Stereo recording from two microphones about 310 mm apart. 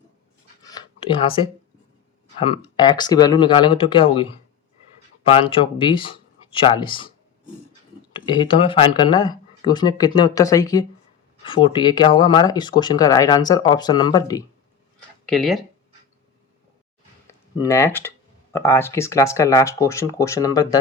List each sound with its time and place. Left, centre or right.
0.7 s a sound: centre
2.6 s speech: centre
5.3 s speech: centre
8.1 s speech: centre
15.3 s speech: centre
17.6 s speech: centre